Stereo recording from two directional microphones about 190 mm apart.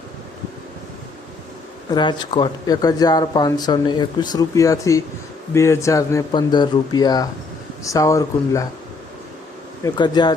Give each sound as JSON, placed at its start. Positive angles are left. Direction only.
{"t": 1.9, "sound": "speech", "side_deg": 25}
{"t": 9.8, "sound": "speech", "side_deg": 25}